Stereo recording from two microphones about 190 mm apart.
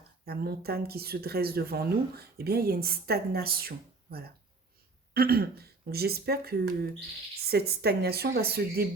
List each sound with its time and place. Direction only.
0.3 s speech: 55° right (ahead or behind)